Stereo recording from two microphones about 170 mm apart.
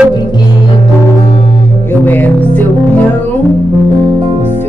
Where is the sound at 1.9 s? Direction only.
10° left (ahead or behind).